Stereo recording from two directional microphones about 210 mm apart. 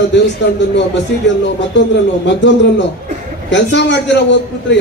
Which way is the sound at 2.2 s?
55° left (ahead or behind).